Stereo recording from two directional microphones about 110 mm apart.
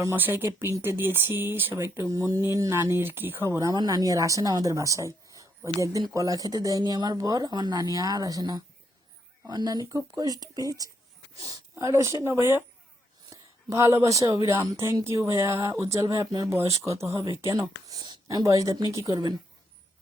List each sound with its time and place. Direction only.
0.0 s speech: 20° right (ahead or behind)